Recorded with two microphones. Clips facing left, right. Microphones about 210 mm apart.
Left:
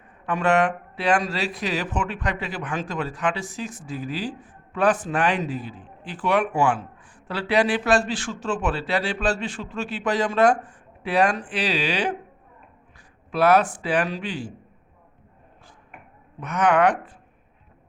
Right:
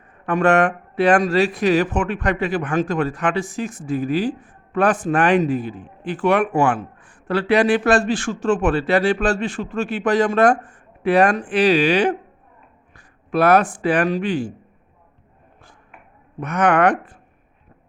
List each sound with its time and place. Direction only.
0.3 s speech: 50° right (ahead or behind)
16.4 s speech: 55° right (ahead or behind)